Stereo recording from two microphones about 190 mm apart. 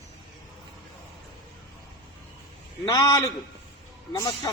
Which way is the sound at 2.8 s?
20° left (ahead or behind).